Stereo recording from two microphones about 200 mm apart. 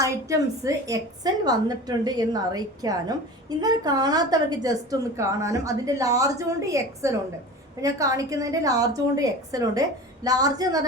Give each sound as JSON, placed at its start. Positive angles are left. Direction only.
{"t": 0.0, "sound": "a woman's voice", "side_deg": -15}